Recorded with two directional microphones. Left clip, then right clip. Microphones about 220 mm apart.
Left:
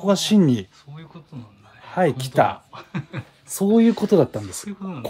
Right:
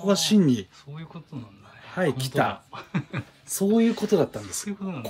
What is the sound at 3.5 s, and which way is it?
Speech, 40° left (ahead or behind).